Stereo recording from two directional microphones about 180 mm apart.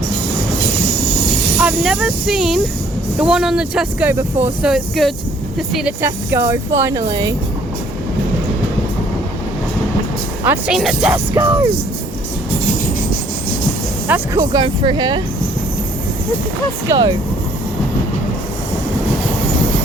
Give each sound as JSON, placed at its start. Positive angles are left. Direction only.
{"t": 1.5, "sound": "speech", "side_deg": -5}
{"t": 6.0, "sound": "speech", "side_deg": -15}
{"t": 10.4, "sound": "speech", "side_deg": -5}
{"t": 14.1, "sound": "speech", "side_deg": -20}
{"t": 16.9, "sound": "speech", "side_deg": -20}